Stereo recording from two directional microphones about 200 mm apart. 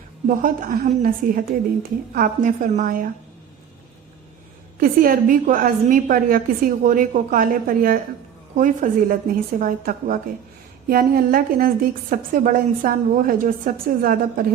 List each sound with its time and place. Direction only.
0.3 s a woman's voice: 45° right (ahead or behind)
4.8 s a woman's voice: 45° right (ahead or behind)